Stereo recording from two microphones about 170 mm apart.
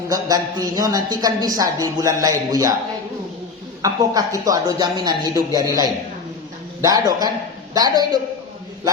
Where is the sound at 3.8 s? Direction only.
20° right (ahead or behind).